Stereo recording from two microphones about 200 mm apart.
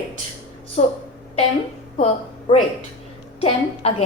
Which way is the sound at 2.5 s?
25° left (ahead or behind).